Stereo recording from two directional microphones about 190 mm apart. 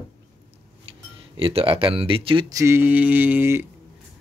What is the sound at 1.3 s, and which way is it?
Speech, 30° right (ahead or behind).